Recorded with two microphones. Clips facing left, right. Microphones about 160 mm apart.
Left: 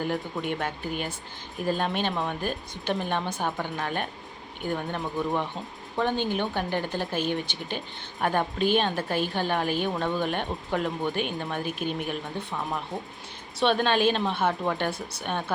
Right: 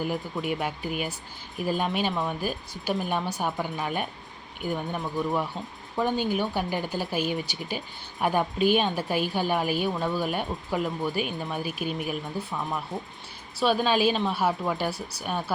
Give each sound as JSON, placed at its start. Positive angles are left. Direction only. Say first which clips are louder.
{"t": 0.0, "sound": "speech", "louder": "even", "side_deg": -5}
{"t": 13.6, "sound": "speech", "louder": "even", "side_deg": -5}